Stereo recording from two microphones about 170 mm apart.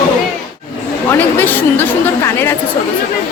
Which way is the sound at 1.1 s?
10° left (ahead or behind).